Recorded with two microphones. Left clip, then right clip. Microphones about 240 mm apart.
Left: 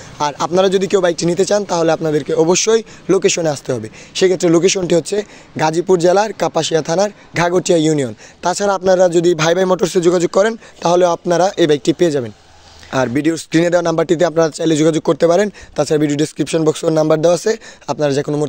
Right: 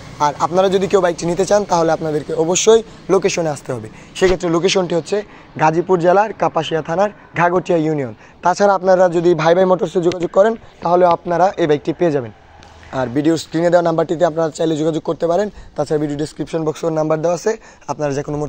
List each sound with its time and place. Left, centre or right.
0.2 s speech: left
4.4 s speech: left
8.6 s speech: left
11.6 s speech: left
12.9 s speech: left